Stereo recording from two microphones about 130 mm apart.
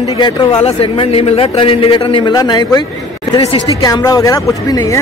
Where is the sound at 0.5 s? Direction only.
50° left (ahead or behind); by 2.8 s 30° left (ahead or behind).